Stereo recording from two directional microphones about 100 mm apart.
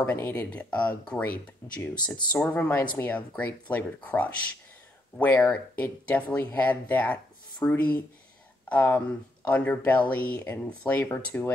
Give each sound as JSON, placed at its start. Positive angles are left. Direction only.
{"t": 0.0, "sound": "speech", "side_deg": 20}